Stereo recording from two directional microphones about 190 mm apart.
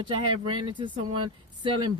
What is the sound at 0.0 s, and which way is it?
Speech, 25° right (ahead or behind).